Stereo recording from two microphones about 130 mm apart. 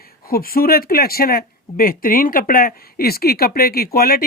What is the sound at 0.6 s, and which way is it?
Speech, 90° left.